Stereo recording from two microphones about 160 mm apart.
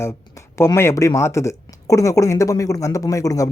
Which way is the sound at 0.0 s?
15° left (ahead or behind).